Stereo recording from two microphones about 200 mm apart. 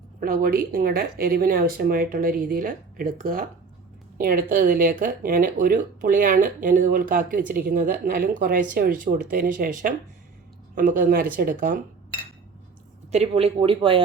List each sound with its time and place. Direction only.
0.2 s speech: 45° right (ahead or behind)
13.1 s speech: 30° right (ahead or behind)